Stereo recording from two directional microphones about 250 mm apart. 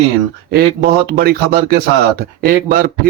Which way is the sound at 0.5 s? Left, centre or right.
Right.